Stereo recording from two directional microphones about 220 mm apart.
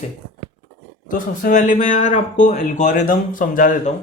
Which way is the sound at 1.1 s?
35° left (ahead or behind).